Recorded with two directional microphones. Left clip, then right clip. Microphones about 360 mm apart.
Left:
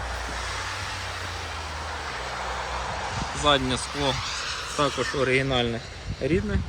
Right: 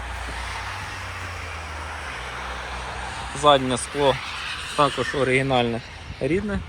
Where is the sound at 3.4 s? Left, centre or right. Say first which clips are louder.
Right 5 dB; centre.